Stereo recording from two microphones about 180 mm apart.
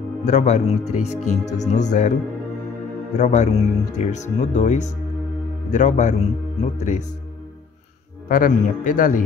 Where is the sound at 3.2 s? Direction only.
40° left (ahead or behind).